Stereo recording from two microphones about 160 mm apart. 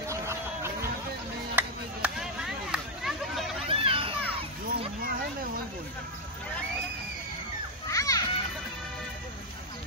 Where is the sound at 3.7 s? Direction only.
35° right (ahead or behind).